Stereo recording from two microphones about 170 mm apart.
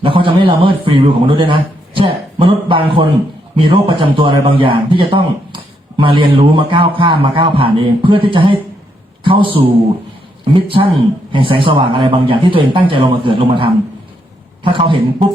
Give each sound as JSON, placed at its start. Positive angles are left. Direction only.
{"t": 0.0, "sound": "a man's voice", "side_deg": -30}